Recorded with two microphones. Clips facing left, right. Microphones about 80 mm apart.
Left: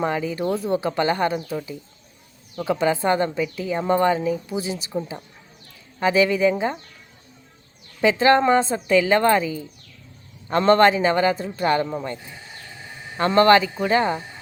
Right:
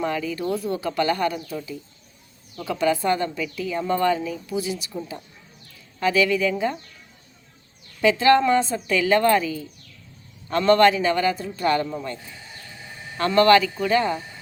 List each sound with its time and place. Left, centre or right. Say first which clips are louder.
0.0 s a woman's voice: left 2 dB; left
8.0 s a woman's voice: left 1 dB; left